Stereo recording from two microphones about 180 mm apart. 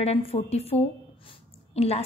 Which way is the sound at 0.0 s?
35° left (ahead or behind).